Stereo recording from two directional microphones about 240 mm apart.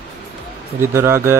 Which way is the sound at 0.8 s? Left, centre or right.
Centre.